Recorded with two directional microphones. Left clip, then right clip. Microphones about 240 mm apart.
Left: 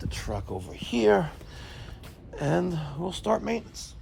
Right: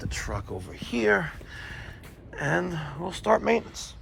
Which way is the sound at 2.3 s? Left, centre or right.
Centre.